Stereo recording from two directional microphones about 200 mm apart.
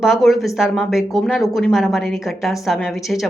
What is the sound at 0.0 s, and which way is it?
Speech, centre (ahead or behind).